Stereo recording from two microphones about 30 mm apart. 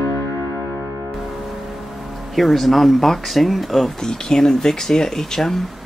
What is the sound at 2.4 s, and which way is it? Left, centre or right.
Speech, centre.